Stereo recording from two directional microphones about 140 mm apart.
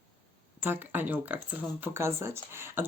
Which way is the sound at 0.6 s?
15° right (ahead or behind).